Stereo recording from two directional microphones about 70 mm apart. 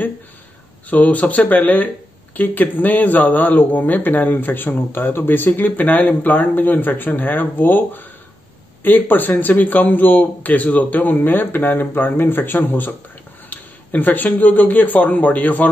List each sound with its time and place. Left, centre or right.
0.8 s speech: left